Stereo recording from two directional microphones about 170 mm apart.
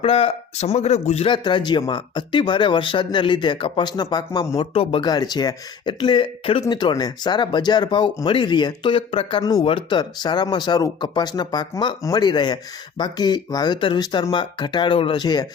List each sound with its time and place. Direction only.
0.0 s speech: 35° left (ahead or behind)
4.7 s speech: 35° left (ahead or behind)